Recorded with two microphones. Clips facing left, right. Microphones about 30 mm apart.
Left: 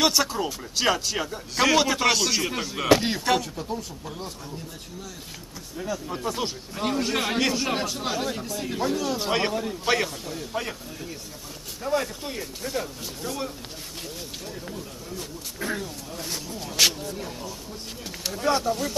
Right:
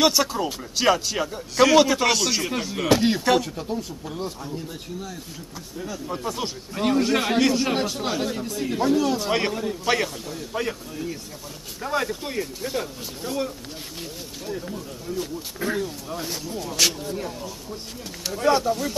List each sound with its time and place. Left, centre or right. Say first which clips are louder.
0.0 s a man's voice: right 2 dB; centre
5.8 s a man's voice: even; centre
6.7 s a man's voice: right 6 dB; centre
17.0 s a man's voice: right 3 dB; centre